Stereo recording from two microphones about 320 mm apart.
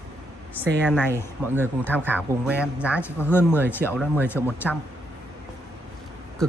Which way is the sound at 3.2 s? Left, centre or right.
Centre.